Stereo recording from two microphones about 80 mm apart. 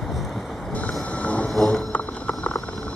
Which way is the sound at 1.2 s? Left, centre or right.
Centre.